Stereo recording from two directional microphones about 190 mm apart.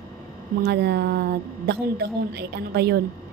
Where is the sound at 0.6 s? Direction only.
60° right (ahead or behind).